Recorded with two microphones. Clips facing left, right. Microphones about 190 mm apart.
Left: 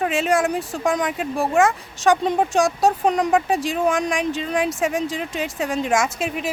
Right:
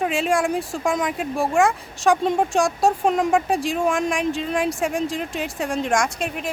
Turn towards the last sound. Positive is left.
turn(degrees=5)  # may be behind; listen again after turning